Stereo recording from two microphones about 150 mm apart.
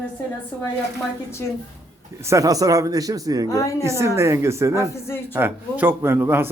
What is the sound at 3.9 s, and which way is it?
A man's voice, 20° right (ahead or behind).